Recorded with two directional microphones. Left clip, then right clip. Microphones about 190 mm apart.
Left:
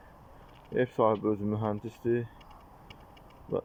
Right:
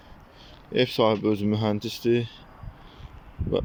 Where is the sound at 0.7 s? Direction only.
10° right (ahead or behind).